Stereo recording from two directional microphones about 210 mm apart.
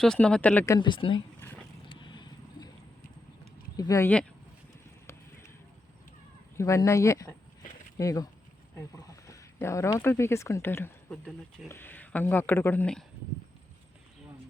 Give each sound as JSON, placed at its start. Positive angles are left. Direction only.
{"t": 0.0, "sound": "speech", "side_deg": 5}
{"t": 1.9, "sound": "vehicle", "side_deg": 20}
{"t": 3.8, "sound": "speech", "side_deg": 15}
{"t": 6.6, "sound": "speech", "side_deg": 15}